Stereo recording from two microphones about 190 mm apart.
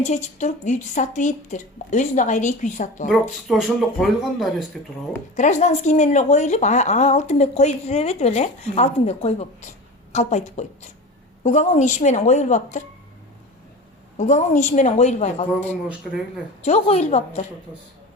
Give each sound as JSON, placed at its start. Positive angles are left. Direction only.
{"t": 0.0, "sound": "a woman's voice", "side_deg": 40}
{"t": 3.1, "sound": "speech", "side_deg": 0}
{"t": 5.4, "sound": "a woman's voice", "side_deg": 35}
{"t": 14.2, "sound": "a woman's voice", "side_deg": 40}
{"t": 16.6, "sound": "a woman's voice", "side_deg": 35}